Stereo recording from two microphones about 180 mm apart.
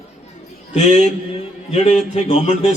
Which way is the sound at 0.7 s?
40° left (ahead or behind).